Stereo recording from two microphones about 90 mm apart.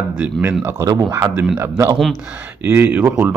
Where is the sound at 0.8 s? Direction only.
45° right (ahead or behind).